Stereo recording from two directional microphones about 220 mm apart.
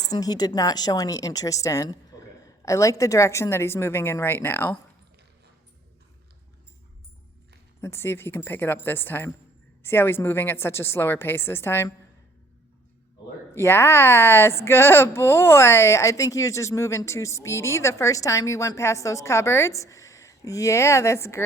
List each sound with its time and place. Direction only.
0.0 s a woman's voice: 15° left (ahead or behind)
7.8 s a woman's voice: 10° left (ahead or behind)
13.5 s a woman's voice: 10° left (ahead or behind)